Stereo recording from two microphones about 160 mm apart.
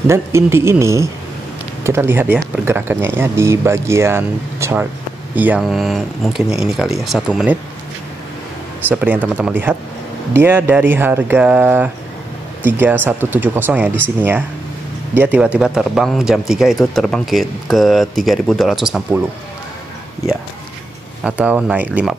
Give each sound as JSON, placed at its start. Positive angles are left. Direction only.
{"t": 0.0, "sound": "speech", "side_deg": -15}
{"t": 5.6, "sound": "a man's voice", "side_deg": 0}
{"t": 8.8, "sound": "speech", "side_deg": -10}
{"t": 15.1, "sound": "a man's voice", "side_deg": -10}
{"t": 21.2, "sound": "speech", "side_deg": -10}